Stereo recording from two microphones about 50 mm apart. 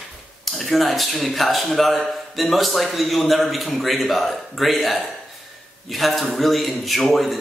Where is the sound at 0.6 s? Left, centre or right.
Centre.